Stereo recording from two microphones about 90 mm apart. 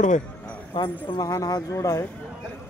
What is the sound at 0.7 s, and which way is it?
Speech, 60° left (ahead or behind).